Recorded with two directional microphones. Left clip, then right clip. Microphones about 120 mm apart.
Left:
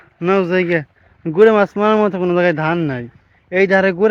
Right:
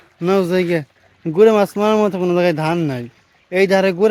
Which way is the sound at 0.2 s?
30° right (ahead or behind).